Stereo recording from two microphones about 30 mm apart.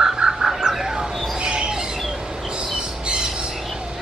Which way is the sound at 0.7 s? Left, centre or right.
Centre.